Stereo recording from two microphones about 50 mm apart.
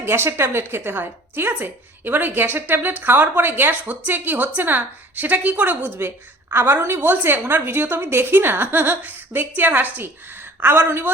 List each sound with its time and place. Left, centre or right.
0.0 s a woman's voice: right
6.0 s a woman's voice: right